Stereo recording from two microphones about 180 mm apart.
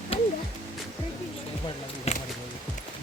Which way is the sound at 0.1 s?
30° left (ahead or behind).